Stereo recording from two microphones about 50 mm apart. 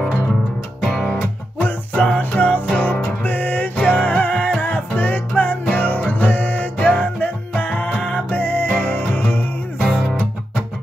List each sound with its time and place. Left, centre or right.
0.8 s music: centre
2.1 s music: left
9.8 s music: centre